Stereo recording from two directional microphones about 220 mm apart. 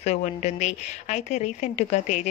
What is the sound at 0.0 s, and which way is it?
A woman's voice, 30° left (ahead or behind).